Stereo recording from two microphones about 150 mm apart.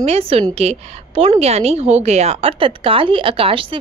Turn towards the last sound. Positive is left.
turn(degrees=-35)  # may be behind; listen again after turning